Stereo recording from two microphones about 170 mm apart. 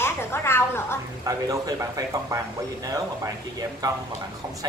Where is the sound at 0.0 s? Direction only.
15° left (ahead or behind).